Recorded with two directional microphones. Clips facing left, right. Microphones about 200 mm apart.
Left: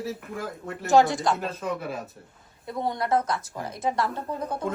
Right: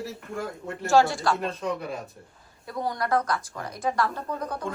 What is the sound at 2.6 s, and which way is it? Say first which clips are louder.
A woman's voice: left 1 dB; 25° left (ahead or behind).